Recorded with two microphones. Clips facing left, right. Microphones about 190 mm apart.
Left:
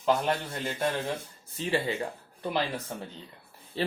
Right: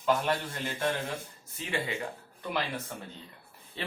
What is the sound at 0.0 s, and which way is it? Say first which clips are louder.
Speech: left 2 dB; 25° left (ahead or behind).